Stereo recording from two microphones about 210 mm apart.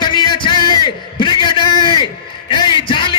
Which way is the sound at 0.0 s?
20° left (ahead or behind).